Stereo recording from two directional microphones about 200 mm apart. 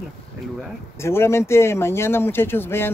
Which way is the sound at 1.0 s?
15° left (ahead or behind).